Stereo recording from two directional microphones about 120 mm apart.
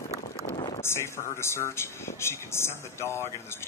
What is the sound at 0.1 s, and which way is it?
Run, 25° right (ahead or behind).